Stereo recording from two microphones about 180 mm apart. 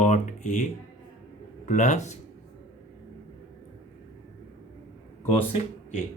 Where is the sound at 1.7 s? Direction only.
45° left (ahead or behind).